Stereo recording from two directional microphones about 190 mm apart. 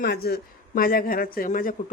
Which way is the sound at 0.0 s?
55° left (ahead or behind).